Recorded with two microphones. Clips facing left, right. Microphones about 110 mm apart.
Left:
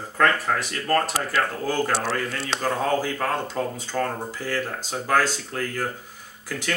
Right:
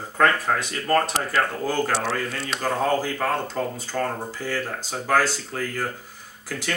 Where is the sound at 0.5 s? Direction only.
15° right (ahead or behind).